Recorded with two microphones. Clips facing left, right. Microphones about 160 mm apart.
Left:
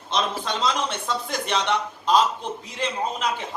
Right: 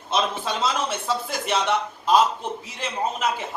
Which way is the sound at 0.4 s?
5° right (ahead or behind).